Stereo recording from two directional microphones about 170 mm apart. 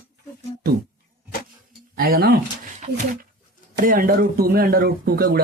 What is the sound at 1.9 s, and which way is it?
Speech, 60° right (ahead or behind).